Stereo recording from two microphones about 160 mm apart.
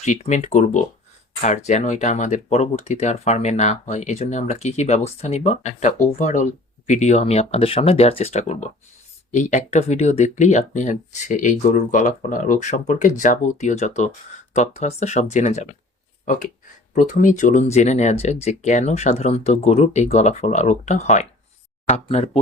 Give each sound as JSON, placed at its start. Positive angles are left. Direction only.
{"t": 0.0, "sound": "speech", "side_deg": 50}